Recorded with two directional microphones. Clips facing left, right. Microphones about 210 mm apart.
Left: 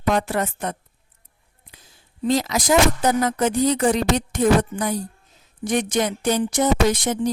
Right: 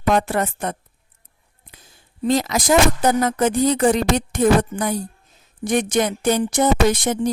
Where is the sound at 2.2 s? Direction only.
50° right (ahead or behind).